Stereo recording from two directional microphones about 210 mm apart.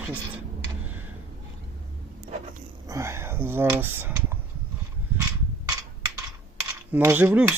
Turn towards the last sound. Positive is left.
turn(degrees=-10)  # may be behind; listen again after turning